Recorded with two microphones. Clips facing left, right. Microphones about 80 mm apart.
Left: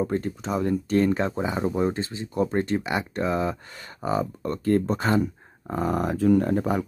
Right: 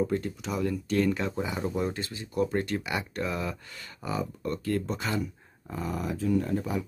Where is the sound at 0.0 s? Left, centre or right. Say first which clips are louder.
Left 2 dB; left.